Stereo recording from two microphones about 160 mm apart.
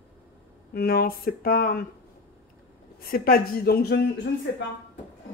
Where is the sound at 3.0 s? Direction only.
65° left (ahead or behind).